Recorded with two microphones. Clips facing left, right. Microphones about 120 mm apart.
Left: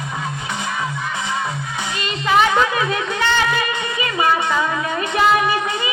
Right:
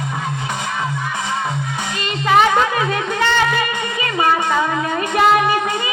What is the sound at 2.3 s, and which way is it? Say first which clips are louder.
Music: right 2 dB; 40° right (ahead or behind).